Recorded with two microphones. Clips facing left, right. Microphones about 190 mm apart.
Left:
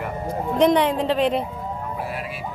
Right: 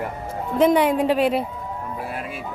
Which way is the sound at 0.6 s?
5° right (ahead or behind).